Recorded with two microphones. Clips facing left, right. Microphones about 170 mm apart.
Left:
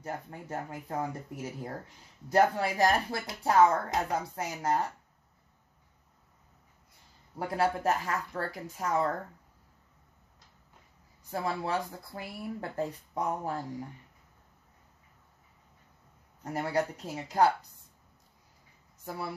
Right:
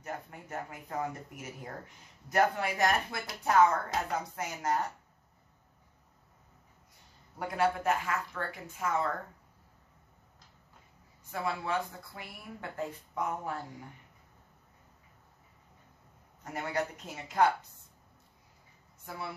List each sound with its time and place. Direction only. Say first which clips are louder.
0.0 s speech: left 3 dB; 30° left (ahead or behind)
7.3 s speech: left 1 dB; 35° left (ahead or behind)
11.2 s speech: left 2 dB; 35° left (ahead or behind)
16.5 s speech: left 4 dB; 35° left (ahead or behind)